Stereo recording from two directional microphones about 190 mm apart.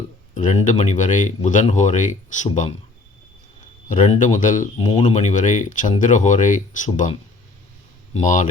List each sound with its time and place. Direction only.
0.3 s speech: 40° left (ahead or behind)
3.8 s speech: 40° left (ahead or behind)
4.8 s speech: 30° left (ahead or behind)